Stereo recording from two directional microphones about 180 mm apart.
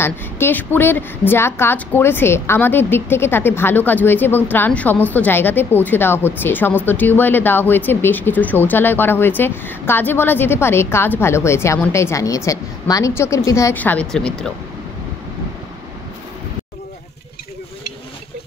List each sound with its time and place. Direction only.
0.0 s a woman's voice: 10° left (ahead or behind)